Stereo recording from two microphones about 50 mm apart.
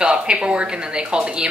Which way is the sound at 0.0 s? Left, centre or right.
Centre.